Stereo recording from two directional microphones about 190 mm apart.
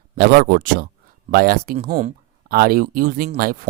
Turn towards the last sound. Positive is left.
turn(degrees=-50)  # may be behind; listen again after turning